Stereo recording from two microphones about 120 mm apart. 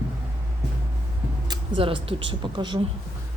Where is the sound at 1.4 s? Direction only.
35° right (ahead or behind).